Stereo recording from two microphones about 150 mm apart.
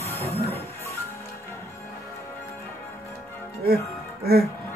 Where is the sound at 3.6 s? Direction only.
90° right.